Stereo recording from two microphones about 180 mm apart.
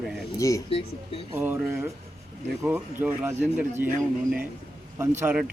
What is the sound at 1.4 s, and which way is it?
Speech, 15° right (ahead or behind).